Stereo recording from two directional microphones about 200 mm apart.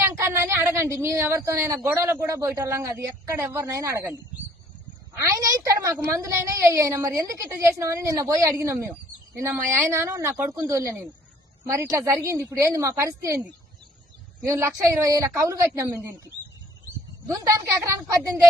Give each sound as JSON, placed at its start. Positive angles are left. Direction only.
{"t": 0.0, "sound": "a woman's voice", "side_deg": -10}
{"t": 5.2, "sound": "a woman's voice", "side_deg": -15}
{"t": 14.4, "sound": "a woman's voice", "side_deg": -15}
{"t": 17.4, "sound": "a woman's voice", "side_deg": -15}